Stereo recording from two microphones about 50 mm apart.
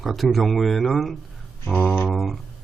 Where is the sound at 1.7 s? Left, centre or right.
Left.